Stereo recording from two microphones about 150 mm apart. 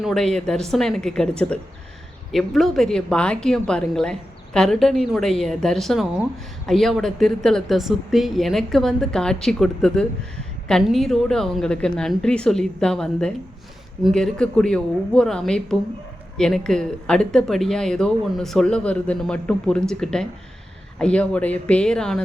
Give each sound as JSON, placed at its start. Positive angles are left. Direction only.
{"t": 0.0, "sound": "a woman's voice", "side_deg": 0}